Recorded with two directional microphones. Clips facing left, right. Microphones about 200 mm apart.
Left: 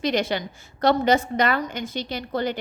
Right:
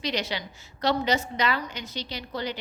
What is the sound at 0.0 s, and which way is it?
A woman's voice, 50° left (ahead or behind).